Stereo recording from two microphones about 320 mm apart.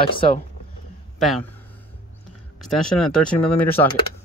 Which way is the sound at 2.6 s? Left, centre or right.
Centre.